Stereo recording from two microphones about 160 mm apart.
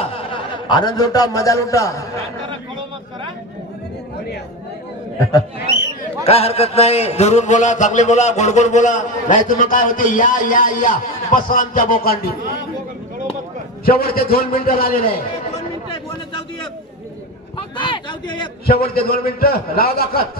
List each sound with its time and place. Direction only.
0.0 s a man's voice: 35° left (ahead or behind); by 2.0 s 20° left (ahead or behind)
6.2 s a man's voice: 40° left (ahead or behind); by 12.2 s 60° left (ahead or behind)
13.8 s a man's voice: 65° left (ahead or behind)
17.6 s speech: 30° left (ahead or behind)
18.7 s a man's voice: 75° left (ahead or behind)